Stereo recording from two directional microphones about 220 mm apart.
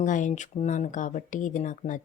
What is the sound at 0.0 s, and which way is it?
Speech, 35° left (ahead or behind).